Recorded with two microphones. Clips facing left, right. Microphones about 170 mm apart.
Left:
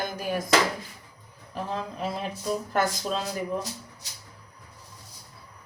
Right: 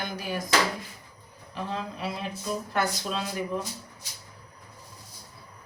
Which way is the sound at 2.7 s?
40° left (ahead or behind).